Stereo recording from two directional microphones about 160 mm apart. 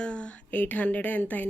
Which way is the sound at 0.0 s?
5° left (ahead or behind).